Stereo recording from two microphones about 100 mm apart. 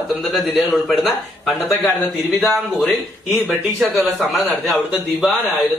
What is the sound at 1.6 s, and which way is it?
Speech, 20° left (ahead or behind).